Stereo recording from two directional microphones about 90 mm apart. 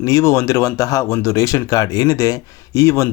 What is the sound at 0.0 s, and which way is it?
Speech, 40° left (ahead or behind).